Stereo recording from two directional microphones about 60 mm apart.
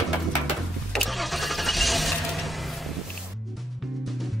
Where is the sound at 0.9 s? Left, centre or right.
Centre.